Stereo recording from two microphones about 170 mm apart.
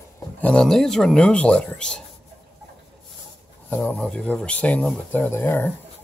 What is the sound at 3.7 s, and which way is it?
Speech, 10° left (ahead or behind).